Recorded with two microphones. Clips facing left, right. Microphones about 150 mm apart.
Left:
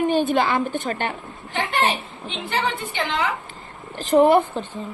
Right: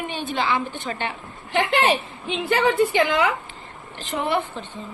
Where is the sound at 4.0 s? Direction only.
40° left (ahead or behind).